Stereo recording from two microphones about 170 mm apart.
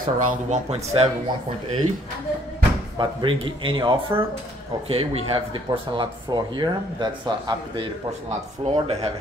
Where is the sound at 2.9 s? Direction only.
30° right (ahead or behind).